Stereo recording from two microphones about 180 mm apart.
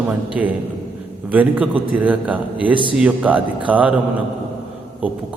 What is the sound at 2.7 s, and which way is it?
Speech, 25° right (ahead or behind).